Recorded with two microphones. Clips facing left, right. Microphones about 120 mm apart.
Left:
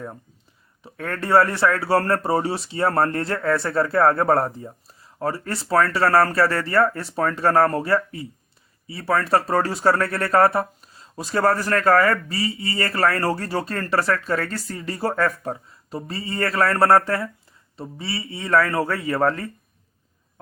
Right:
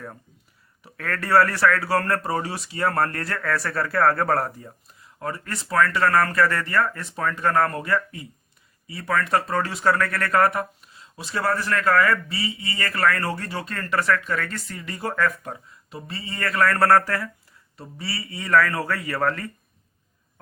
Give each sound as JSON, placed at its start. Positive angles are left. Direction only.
{"t": 0.8, "sound": "speech", "side_deg": 25}